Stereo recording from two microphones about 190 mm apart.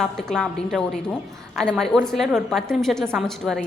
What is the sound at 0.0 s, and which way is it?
A woman's voice, centre (ahead or behind).